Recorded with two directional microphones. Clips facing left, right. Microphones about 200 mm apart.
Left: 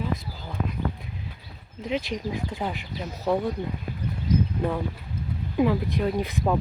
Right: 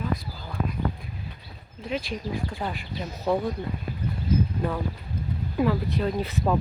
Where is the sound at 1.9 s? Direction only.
20° left (ahead or behind).